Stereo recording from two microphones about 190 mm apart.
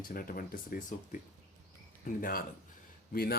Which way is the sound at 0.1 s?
50° left (ahead or behind).